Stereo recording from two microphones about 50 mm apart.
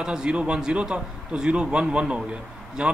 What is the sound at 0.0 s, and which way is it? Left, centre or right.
Speech, centre.